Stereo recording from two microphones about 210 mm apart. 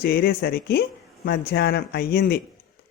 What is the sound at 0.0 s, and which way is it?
Speech, 50° left (ahead or behind).